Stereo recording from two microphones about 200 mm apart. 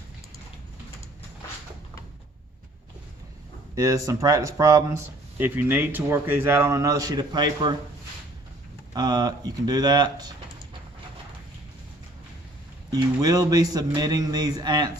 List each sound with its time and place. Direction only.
3.8 s speech: 15° right (ahead or behind)
8.9 s a man's voice: 20° right (ahead or behind)
12.9 s a man's voice: 20° right (ahead or behind)